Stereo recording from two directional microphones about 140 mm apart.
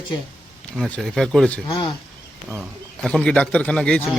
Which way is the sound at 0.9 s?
5° left (ahead or behind).